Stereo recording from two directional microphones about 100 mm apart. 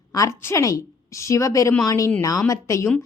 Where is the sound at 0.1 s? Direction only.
35° left (ahead or behind).